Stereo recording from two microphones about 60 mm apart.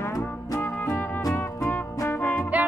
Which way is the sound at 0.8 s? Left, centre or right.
Left.